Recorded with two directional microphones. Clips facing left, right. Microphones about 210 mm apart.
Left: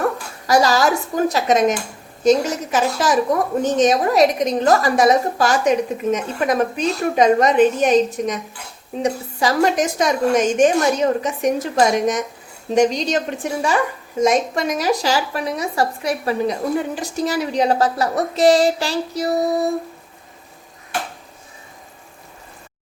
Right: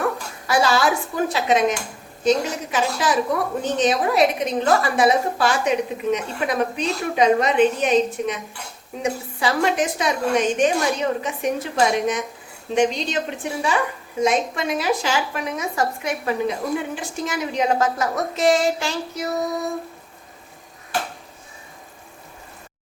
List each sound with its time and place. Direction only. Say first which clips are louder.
0.4 s a woman's voice: left 3 dB; 40° left (ahead or behind)